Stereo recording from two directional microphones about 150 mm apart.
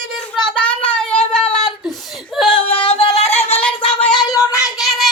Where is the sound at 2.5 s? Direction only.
40° left (ahead or behind).